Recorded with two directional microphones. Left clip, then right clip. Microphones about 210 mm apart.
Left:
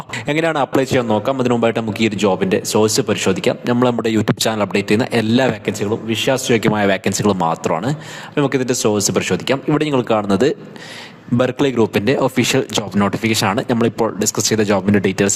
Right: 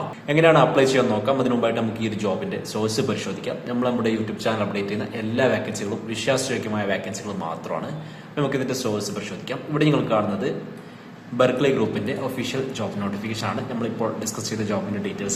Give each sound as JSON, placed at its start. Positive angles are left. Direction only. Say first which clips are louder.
{"t": 0.3, "sound": "a man's voice", "louder": "right 1 dB", "side_deg": 55}